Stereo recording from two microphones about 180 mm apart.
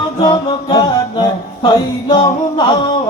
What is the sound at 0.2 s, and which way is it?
Music, 25° left (ahead or behind).